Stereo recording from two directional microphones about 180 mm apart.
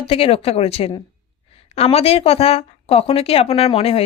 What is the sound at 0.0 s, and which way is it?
Speech, 35° left (ahead or behind).